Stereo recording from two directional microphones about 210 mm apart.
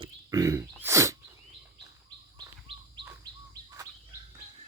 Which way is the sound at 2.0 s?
20° right (ahead or behind).